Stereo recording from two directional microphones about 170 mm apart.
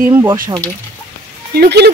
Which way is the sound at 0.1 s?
15° right (ahead or behind).